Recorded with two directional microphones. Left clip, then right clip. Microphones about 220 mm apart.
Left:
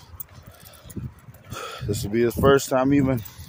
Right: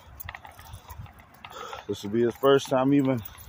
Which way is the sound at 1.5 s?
30° left (ahead or behind).